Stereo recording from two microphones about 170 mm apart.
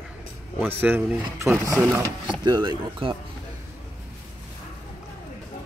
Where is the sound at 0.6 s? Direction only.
10° right (ahead or behind).